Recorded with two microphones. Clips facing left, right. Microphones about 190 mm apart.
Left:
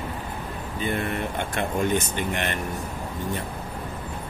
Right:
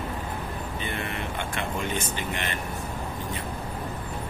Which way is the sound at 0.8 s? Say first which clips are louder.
Left 8 dB; 45° left (ahead or behind).